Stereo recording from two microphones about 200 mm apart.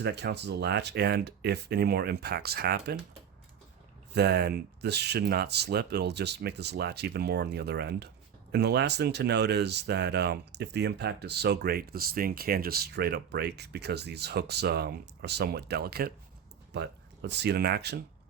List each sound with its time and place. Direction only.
0.0 s speech: 55° right (ahead or behind)
4.1 s speech: 55° right (ahead or behind)